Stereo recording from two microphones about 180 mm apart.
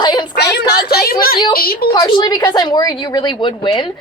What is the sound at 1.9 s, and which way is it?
Speech, 25° left (ahead or behind).